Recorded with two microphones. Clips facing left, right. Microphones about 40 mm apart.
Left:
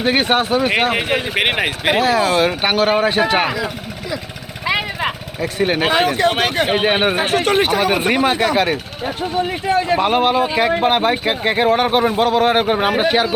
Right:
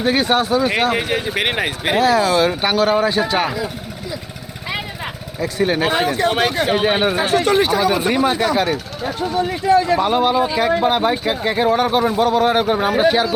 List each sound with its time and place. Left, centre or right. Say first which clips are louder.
0.0 s speech: left 1 dB; left
2.0 s speech: right 2 dB; left
5.4 s speech: even; left
5.9 s speech: left 2 dB; left
6.7 s speech: left 1 dB; left
10.0 s speech: left 1 dB; left
12.4 s speech: left 1 dB; left